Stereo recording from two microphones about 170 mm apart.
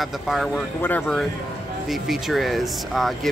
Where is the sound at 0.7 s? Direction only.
10° left (ahead or behind).